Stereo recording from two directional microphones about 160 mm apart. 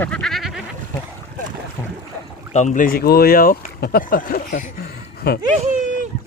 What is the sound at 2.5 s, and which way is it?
Speech, 50° left (ahead or behind).